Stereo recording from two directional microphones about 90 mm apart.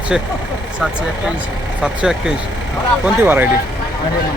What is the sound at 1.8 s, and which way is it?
Speech, 5° right (ahead or behind).